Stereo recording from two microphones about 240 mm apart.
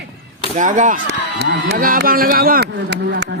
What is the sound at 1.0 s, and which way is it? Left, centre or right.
A man's voice, right.